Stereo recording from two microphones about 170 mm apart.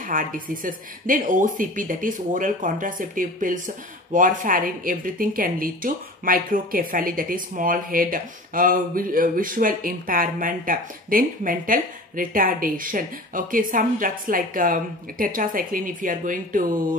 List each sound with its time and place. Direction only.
0.0 s speech: 55° right (ahead or behind)